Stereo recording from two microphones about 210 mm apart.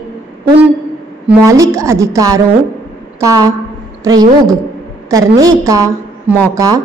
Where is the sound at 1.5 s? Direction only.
15° right (ahead or behind).